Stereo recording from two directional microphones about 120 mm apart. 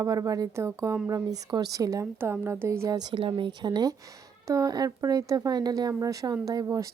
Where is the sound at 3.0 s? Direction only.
40° right (ahead or behind).